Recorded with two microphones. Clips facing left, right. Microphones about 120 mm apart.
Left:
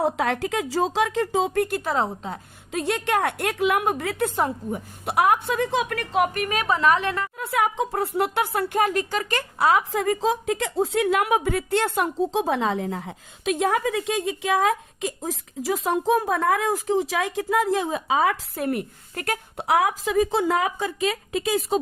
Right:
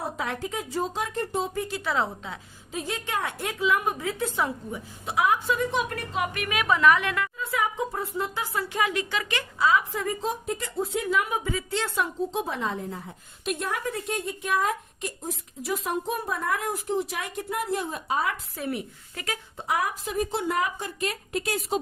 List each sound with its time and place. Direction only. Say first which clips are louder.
0.0 s a woman's voice: left 8 dB; 85° left; by 2.4 s 40° left (ahead or behind)
2.7 s a woman's voice: left 7 dB; 75° left (ahead or behind)
4.4 s a woman's voice: left 4 dB; 45° left (ahead or behind)
5.0 s a woman's voice: left 4 dB; 65° left (ahead or behind); by 6.2 s 80° left
6.2 s a woman's voice: left 3 dB; 40° left (ahead or behind)
7.3 s speech: left 4 dB; 65° left (ahead or behind); by 9.5 s 40° left (ahead or behind)
9.6 s a woman's voice: left 3 dB; 65° left (ahead or behind)
12.3 s a woman's voice: left 6 dB; 90° left
18.5 s a woman's voice: left 5 dB; 55° left (ahead or behind); by 20.7 s 90° left